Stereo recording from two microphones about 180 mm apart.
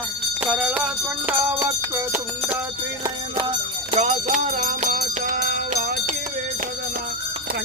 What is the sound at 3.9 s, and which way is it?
Music, 35° right (ahead or behind).